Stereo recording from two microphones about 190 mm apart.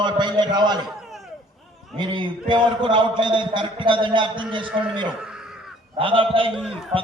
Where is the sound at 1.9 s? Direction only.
25° right (ahead or behind).